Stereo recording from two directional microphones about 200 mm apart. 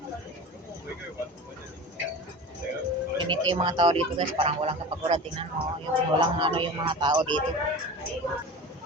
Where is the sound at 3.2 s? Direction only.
25° right (ahead or behind).